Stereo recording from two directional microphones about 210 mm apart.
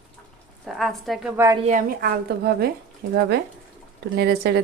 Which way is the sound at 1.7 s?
40° right (ahead or behind).